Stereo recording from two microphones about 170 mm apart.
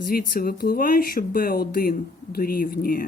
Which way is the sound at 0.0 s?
60° left (ahead or behind).